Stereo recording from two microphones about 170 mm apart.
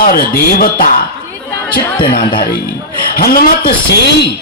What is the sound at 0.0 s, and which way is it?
Speech, 60° left (ahead or behind).